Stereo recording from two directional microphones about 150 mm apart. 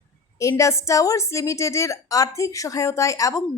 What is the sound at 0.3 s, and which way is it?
A woman's voice, 20° left (ahead or behind).